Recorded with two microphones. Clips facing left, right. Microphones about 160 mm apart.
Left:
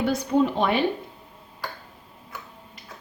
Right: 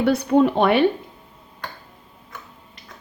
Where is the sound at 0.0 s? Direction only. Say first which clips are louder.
Right 5 dB; 65° right (ahead or behind).